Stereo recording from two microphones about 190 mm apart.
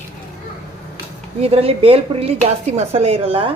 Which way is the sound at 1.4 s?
30° right (ahead or behind).